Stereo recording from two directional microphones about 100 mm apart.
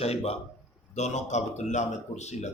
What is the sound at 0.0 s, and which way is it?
Speech, 85° left.